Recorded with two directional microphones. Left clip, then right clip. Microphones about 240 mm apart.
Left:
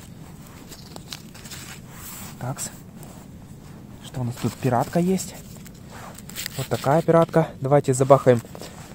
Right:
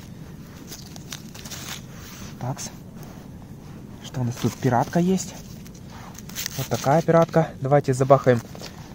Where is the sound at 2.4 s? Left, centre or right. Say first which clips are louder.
Even; centre.